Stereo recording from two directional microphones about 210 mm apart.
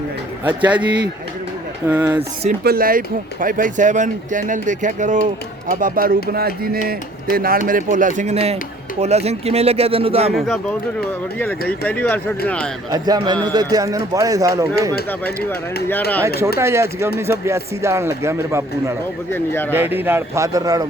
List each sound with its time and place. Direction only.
0.4 s a man's voice: 5° right (ahead or behind)
2.6 s speech: 45° right (ahead or behind); by 10.3 s 30° right (ahead or behind)
10.3 s speech: centre (ahead or behind)
11.9 s speech: 10° left (ahead or behind)
12.9 s a man's voice: 20° right (ahead or behind)
15.9 s speech: 10° left (ahead or behind)
16.6 s a man's voice: 15° right (ahead or behind)
19.3 s speech: 10° left (ahead or behind)
19.7 s a man's voice: 10° right (ahead or behind)